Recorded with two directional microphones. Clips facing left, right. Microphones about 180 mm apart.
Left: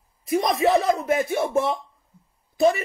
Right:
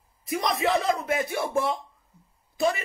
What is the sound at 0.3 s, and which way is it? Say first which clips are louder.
A man's voice: left 5 dB; 25° left (ahead or behind).